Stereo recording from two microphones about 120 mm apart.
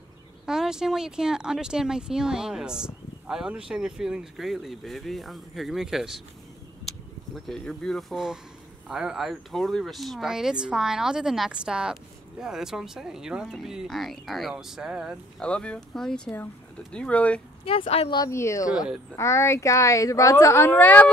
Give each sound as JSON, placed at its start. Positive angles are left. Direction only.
{"t": 0.5, "sound": "speech", "side_deg": -5}
{"t": 7.3, "sound": "speech", "side_deg": 5}
{"t": 15.3, "sound": "speech", "side_deg": 5}
{"t": 17.6, "sound": "speech", "side_deg": 55}
{"t": 18.3, "sound": "a woman's voice", "side_deg": 25}
{"t": 20.6, "sound": "speech", "side_deg": 15}